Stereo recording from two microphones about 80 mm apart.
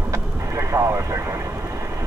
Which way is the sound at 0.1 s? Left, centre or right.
Right.